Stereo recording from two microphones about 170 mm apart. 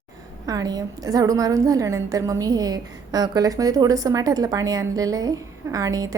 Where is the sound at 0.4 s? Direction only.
20° right (ahead or behind).